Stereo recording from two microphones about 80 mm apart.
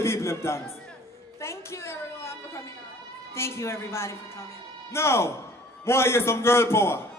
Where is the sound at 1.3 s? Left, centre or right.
Left.